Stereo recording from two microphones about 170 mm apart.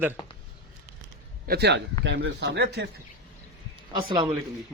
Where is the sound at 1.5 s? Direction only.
75° right (ahead or behind).